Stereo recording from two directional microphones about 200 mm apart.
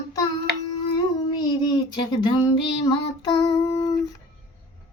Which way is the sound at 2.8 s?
15° left (ahead or behind).